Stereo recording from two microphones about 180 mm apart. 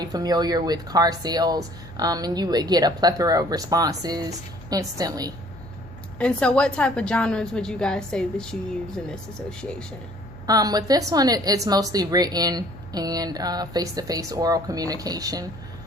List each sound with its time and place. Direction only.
0.0 s speech: 20° right (ahead or behind)
6.1 s a woman's voice: 5° left (ahead or behind)
10.4 s speech: 20° right (ahead or behind)